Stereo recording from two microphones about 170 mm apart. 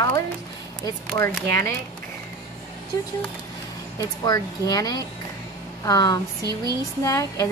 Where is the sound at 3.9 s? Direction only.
20° left (ahead or behind).